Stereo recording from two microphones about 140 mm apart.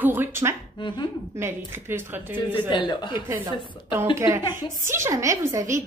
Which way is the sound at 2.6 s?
35° left (ahead or behind).